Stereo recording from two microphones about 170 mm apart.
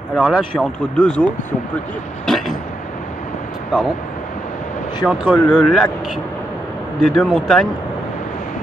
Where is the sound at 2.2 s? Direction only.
Centre (ahead or behind).